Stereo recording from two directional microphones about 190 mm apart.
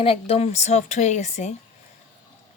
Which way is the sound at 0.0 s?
30° left (ahead or behind).